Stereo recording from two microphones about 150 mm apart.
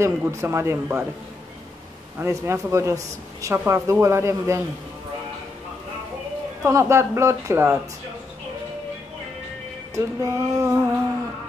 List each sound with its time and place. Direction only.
0.0 s speech: 20° right (ahead or behind)
2.1 s speech: 20° right (ahead or behind)
6.6 s speech: 20° right (ahead or behind)
9.9 s speech: 20° right (ahead or behind)